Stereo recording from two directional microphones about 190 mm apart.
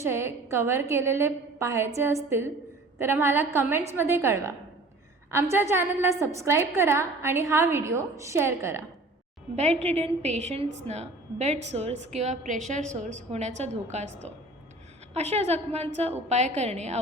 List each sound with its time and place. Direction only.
0.0 s a woman's voice: 15° right (ahead or behind)
9.6 s a woman's voice: 35° right (ahead or behind)